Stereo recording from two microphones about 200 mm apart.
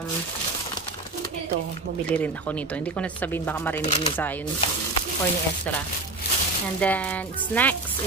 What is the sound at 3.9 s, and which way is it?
Speech, 35° left (ahead or behind).